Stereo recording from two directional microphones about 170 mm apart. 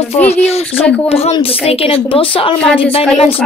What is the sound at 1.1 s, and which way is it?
A child's voice, 35° left (ahead or behind).